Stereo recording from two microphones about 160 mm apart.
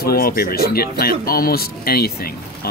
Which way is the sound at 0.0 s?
70° left (ahead or behind).